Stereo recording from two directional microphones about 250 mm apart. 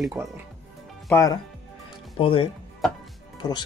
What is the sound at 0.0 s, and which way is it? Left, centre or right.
Speech, centre.